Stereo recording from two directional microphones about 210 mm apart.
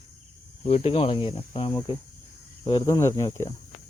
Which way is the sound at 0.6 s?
25° left (ahead or behind).